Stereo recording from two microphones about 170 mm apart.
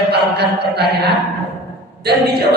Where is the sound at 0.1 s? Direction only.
75° right (ahead or behind).